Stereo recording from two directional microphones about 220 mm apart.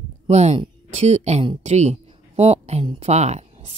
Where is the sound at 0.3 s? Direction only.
30° right (ahead or behind).